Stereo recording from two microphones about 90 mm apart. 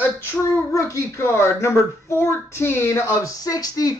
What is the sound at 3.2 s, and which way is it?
Speech, 40° left (ahead or behind).